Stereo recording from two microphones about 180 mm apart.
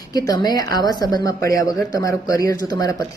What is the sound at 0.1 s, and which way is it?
Speech, 20° left (ahead or behind).